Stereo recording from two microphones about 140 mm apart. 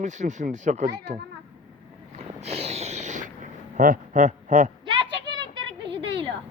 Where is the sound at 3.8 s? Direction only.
70° right (ahead or behind).